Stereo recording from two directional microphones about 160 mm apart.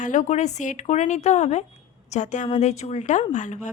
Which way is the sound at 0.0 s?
50° left (ahead or behind).